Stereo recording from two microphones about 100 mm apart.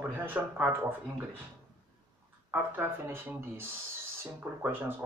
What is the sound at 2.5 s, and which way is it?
Speech, 20° right (ahead or behind).